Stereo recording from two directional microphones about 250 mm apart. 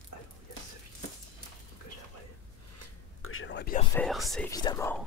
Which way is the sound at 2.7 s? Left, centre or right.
Left.